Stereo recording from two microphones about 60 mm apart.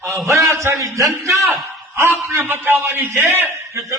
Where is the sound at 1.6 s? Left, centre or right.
Right.